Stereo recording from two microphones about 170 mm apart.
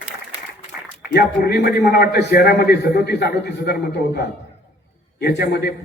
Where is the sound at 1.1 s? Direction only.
75° left (ahead or behind).